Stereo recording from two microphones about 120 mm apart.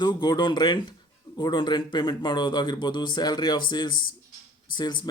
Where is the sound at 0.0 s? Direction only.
40° left (ahead or behind).